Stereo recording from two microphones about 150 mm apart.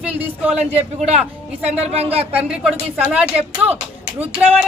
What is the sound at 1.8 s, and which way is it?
Speech, 45° right (ahead or behind).